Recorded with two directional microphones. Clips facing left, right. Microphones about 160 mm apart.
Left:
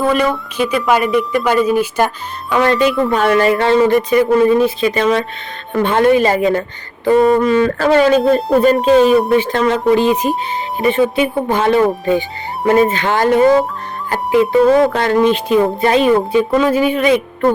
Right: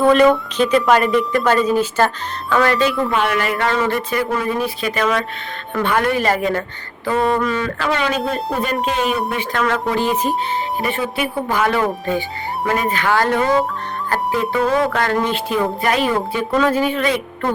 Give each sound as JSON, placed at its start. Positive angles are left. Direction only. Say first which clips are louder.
{"t": 0.0, "sound": "a woman's voice", "louder": "right 3 dB", "side_deg": 5}
{"t": 3.1, "sound": "a sound", "louder": "left 6 dB", "side_deg": 35}
{"t": 3.8, "sound": "speech", "louder": "left 8 dB", "side_deg": 20}
{"t": 7.1, "sound": "a sound", "louder": "left 7 dB", "side_deg": 30}
{"t": 9.3, "sound": "speech", "louder": "left 7 dB", "side_deg": 30}
{"t": 14.1, "sound": "music", "louder": "left 7 dB", "side_deg": 20}
{"t": 14.6, "sound": "speech", "louder": "left 6 dB", "side_deg": 35}